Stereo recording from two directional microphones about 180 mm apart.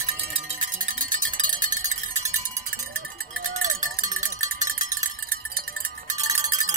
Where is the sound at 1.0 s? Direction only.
50° right (ahead or behind).